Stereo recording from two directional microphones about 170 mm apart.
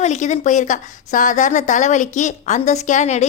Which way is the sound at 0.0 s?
45° left (ahead or behind).